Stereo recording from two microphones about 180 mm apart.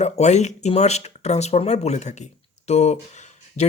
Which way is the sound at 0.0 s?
40° left (ahead or behind).